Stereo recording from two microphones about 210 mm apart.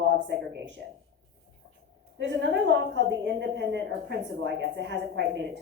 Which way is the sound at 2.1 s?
60° right (ahead or behind).